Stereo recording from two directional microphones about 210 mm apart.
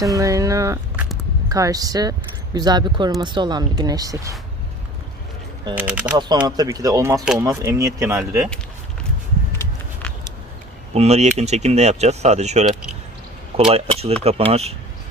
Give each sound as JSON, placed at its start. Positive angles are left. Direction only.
{"t": 0.0, "sound": "speech", "side_deg": -15}
{"t": 5.7, "sound": "speech", "side_deg": -10}
{"t": 6.1, "sound": "speech", "side_deg": -20}
{"t": 10.9, "sound": "speech", "side_deg": -30}